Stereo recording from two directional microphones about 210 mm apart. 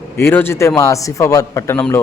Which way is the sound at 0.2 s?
10° left (ahead or behind).